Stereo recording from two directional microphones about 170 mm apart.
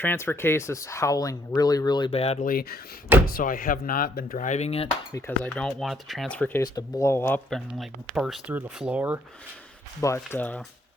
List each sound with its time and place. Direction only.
0.0 s speech: 10° left (ahead or behind); by 2.4 s 35° left (ahead or behind)
2.4 s speech: 60° left (ahead or behind); by 4.9 s 40° left (ahead or behind)
5.1 s speech: 10° left (ahead or behind)
6.6 s speech: 20° left (ahead or behind)
7.5 s speech: centre (ahead or behind)
10.0 s speech: 20° left (ahead or behind)